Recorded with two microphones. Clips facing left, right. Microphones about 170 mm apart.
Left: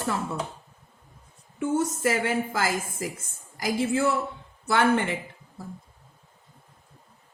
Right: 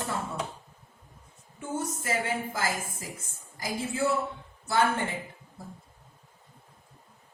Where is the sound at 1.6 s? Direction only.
80° left.